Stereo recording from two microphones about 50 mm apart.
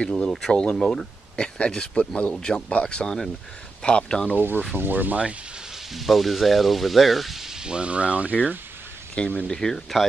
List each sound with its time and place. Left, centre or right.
0.0 s speech: centre
4.7 s speech: right
5.9 s speech: centre; by 8.4 s right
9.2 s speech: left